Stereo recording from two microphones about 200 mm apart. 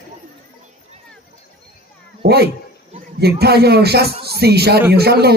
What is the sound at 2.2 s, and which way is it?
Speech, 55° right (ahead or behind).